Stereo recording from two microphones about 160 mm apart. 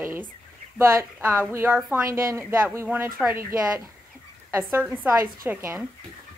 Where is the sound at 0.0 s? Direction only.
15° right (ahead or behind).